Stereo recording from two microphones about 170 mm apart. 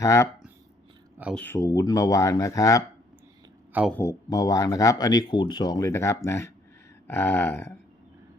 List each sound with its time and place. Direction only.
0.0 s speech: 15° left (ahead or behind)
1.4 s speech: 15° left (ahead or behind)
3.8 s speech: 10° left (ahead or behind)
4.3 s speech: 20° left (ahead or behind)